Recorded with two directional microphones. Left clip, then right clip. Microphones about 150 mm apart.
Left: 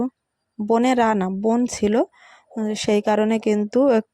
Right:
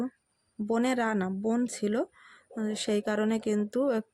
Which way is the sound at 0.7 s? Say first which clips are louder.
Left 11 dB; 45° left (ahead or behind).